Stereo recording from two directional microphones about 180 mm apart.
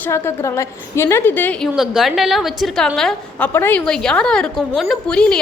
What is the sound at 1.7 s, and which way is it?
A woman's voice, centre (ahead or behind).